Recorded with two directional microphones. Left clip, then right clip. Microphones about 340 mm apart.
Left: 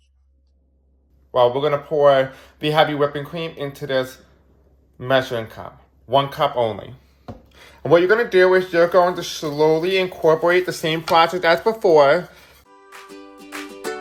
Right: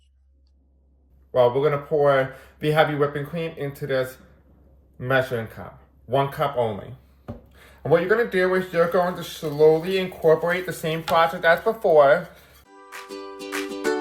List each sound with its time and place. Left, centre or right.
1.3 s speech: centre